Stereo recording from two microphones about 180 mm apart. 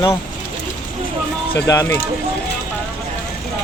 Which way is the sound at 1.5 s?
15° left (ahead or behind).